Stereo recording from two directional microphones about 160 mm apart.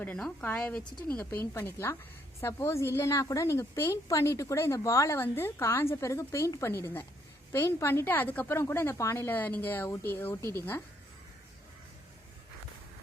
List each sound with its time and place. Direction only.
0.0 s a woman's voice: 5° left (ahead or behind)